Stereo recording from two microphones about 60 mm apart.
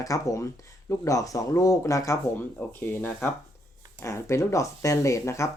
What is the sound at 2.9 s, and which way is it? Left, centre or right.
Speech, left.